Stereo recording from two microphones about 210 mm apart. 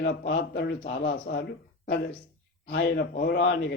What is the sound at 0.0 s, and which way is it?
Speech, 50° left (ahead or behind).